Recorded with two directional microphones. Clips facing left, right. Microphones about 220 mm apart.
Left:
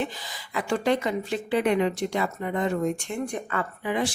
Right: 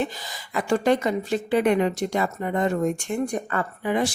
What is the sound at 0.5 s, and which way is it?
Speech, 45° right (ahead or behind).